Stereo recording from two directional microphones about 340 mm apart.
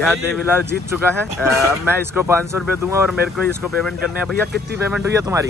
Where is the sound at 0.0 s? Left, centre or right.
Centre.